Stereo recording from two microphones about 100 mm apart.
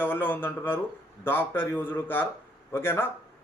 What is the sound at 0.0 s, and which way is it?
Speech, 20° left (ahead or behind).